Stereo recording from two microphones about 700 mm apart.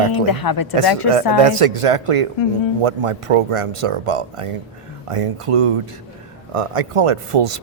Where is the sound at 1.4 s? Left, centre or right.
Right.